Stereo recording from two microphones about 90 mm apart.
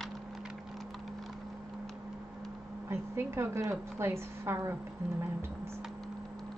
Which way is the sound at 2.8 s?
25° right (ahead or behind).